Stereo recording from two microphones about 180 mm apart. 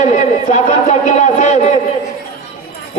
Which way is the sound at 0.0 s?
40° left (ahead or behind).